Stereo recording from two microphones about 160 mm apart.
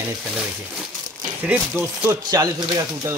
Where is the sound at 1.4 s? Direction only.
10° right (ahead or behind).